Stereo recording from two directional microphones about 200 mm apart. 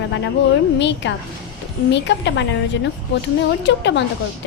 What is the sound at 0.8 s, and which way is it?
A woman's voice, 60° left (ahead or behind).